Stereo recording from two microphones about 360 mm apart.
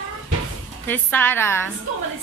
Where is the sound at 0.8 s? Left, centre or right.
Centre.